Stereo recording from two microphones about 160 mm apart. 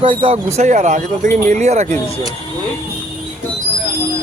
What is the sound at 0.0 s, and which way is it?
Speech, 35° right (ahead or behind).